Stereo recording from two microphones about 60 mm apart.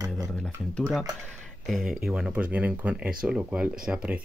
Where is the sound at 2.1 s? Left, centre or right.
Right.